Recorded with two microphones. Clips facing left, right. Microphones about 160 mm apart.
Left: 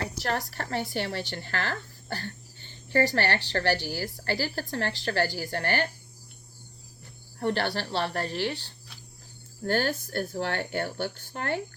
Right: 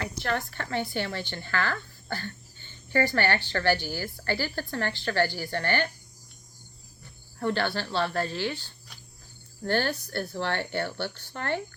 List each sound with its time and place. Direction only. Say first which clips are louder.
0.0 s a woman's voice: even; 35° left (ahead or behind)
7.3 s a woman's voice: even; 35° left (ahead or behind)